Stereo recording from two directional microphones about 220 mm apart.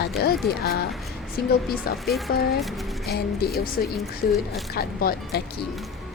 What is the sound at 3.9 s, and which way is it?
Speech, centre (ahead or behind).